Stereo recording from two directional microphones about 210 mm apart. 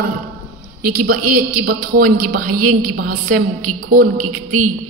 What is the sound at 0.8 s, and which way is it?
A woman's voice, 45° right (ahead or behind).